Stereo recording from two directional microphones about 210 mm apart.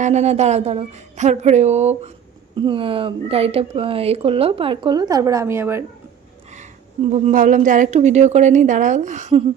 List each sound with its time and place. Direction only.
0.0 s a woman's voice: 30° right (ahead or behind); by 5.8 s 10° right (ahead or behind)
7.1 s a woman's voice: 35° right (ahead or behind)